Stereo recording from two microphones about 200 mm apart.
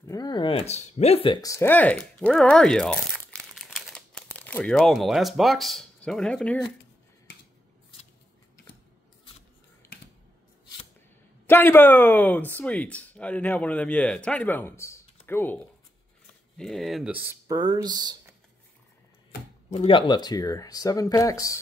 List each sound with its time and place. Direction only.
0.0 s speech: 20° left (ahead or behind)
11.4 s speech: 10° left (ahead or behind); by 18.1 s 20° right (ahead or behind)
19.7 s speech: 30° left (ahead or behind)